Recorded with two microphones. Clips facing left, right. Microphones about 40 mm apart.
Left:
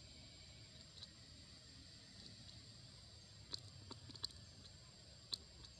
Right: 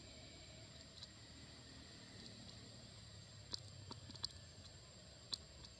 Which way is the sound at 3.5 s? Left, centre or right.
Left.